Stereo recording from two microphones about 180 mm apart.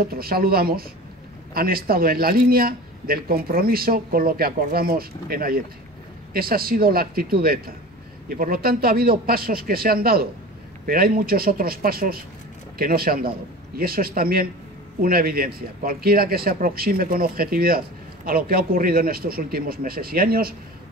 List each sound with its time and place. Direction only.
0.0 s a man's voice: 55° right (ahead or behind)